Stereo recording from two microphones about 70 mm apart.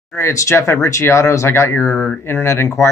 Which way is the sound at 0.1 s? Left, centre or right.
Left.